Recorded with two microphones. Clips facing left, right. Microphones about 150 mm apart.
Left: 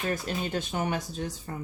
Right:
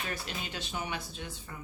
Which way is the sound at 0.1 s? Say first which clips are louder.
Left 9 dB; 45° left (ahead or behind).